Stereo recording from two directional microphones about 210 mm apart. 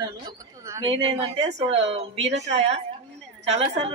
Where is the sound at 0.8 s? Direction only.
30° right (ahead or behind).